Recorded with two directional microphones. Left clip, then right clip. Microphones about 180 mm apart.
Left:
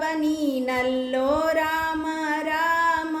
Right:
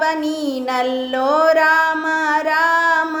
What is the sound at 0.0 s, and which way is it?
Child singing, 10° left (ahead or behind).